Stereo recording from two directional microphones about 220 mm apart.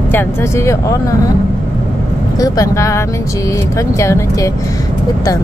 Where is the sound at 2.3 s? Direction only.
15° left (ahead or behind).